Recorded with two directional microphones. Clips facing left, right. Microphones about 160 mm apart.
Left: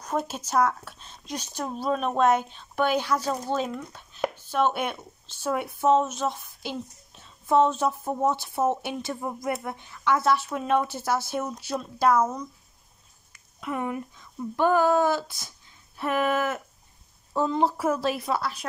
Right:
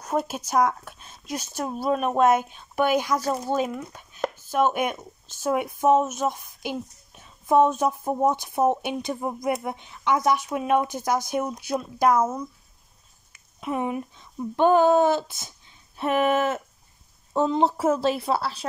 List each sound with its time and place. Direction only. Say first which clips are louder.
0.0 s speech: right 3 dB; 10° right (ahead or behind)
13.3 s a woman's voice: right 3 dB; 20° right (ahead or behind)